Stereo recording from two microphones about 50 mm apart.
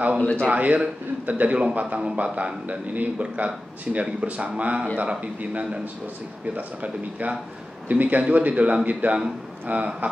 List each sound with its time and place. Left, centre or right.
0.2 s speech: left
0.5 s speech: right